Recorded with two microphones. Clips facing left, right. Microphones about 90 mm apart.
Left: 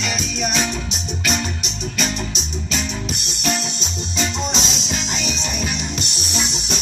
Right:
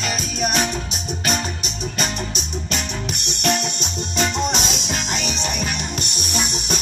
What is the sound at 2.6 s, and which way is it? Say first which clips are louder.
Music: left 2 dB; 60° right (ahead or behind).